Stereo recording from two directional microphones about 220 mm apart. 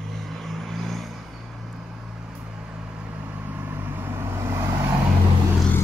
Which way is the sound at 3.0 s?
5° right (ahead or behind).